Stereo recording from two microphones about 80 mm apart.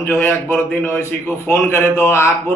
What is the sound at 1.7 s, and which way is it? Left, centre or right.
Speech, left.